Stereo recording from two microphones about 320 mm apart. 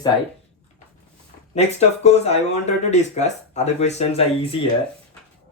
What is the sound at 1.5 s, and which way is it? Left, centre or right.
Speech, centre.